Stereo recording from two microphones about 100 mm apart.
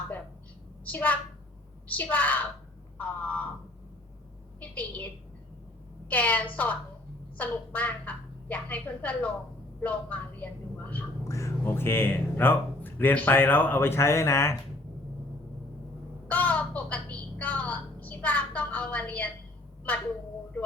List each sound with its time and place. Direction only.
0.9 s a woman's voice: 15° left (ahead or behind)
4.6 s a woman's voice: 15° left (ahead or behind)
6.1 s a woman's voice: 15° left (ahead or behind)
11.3 s speech: 30° left (ahead or behind)
16.3 s a woman's voice: 15° left (ahead or behind)